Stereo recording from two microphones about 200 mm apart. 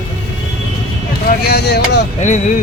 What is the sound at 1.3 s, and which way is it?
Speech, 55° left (ahead or behind).